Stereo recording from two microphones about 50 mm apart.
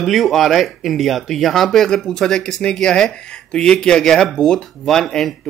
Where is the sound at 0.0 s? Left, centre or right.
Centre.